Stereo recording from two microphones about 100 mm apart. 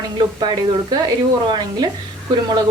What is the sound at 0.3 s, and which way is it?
Speech, 45° right (ahead or behind).